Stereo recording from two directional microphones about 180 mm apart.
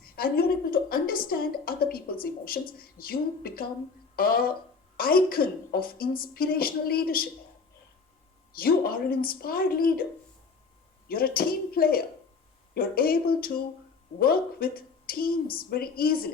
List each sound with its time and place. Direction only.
0.0 s a woman's voice: 55° left (ahead or behind)
8.5 s a woman's voice: 55° left (ahead or behind)
11.1 s a woman's voice: 55° left (ahead or behind)